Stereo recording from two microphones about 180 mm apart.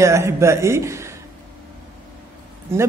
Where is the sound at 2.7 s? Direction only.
15° right (ahead or behind).